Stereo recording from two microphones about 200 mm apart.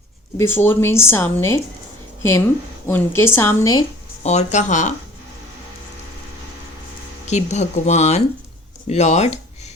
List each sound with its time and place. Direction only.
0.3 s speech: 10° left (ahead or behind)
2.8 s speech: 10° left (ahead or behind)
4.2 s speech: 35° left (ahead or behind)
7.3 s speech: 35° left (ahead or behind)